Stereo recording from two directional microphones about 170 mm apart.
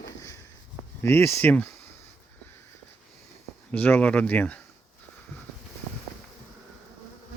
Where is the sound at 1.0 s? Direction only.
15° left (ahead or behind).